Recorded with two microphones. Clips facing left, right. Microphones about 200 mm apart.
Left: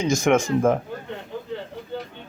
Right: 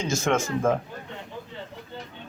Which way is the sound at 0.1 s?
15° left (ahead or behind).